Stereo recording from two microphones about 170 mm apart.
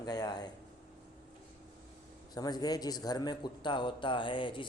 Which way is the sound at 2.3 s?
25° left (ahead or behind).